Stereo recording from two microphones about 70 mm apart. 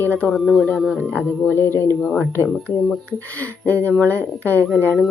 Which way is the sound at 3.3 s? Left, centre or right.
Left.